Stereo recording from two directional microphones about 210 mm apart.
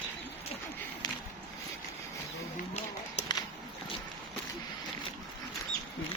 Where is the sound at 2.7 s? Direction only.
30° left (ahead or behind).